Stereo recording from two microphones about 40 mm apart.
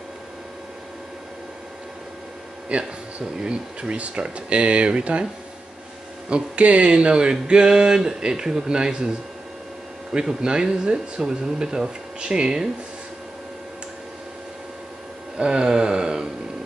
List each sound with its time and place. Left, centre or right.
2.7 s speech: right
6.2 s speech: right
10.1 s speech: centre
15.3 s speech: right